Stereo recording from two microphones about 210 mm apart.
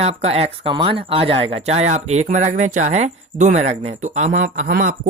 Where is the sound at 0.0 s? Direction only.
30° right (ahead or behind).